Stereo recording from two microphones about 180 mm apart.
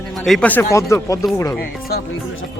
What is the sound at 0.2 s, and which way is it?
Speech, 5° left (ahead or behind).